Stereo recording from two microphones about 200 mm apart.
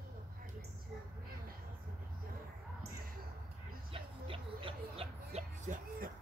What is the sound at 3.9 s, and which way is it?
Music, 25° right (ahead or behind).